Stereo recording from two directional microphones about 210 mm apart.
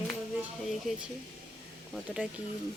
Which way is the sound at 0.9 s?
Centre (ahead or behind).